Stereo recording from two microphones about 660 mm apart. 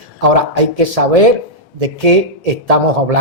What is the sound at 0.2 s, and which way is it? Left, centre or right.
Speech, right.